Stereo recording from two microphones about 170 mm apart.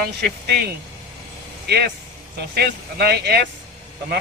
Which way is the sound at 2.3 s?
70° right (ahead or behind).